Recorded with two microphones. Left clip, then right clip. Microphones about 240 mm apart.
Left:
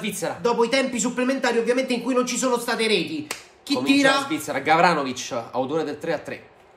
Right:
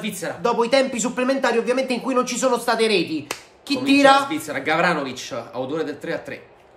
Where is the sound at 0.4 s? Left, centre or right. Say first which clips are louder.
Right 3 dB; centre.